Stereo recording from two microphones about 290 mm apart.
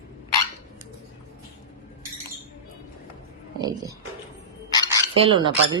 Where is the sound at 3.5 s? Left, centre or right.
Centre.